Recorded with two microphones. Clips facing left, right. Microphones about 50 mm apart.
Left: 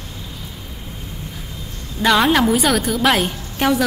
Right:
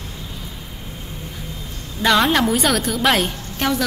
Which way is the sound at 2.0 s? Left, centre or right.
Centre.